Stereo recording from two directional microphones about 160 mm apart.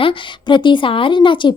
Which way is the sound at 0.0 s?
30° left (ahead or behind).